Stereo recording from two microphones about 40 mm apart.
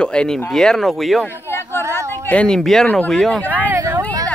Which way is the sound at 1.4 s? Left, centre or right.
Left.